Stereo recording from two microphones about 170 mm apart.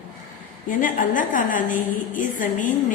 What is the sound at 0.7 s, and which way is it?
A woman's voice, 50° left (ahead or behind).